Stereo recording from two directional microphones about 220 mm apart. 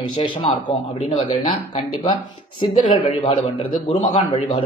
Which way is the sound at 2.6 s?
20° left (ahead or behind).